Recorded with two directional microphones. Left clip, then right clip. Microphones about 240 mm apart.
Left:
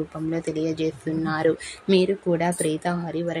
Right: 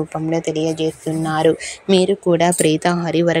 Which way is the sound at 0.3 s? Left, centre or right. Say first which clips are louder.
Right 7 dB; centre.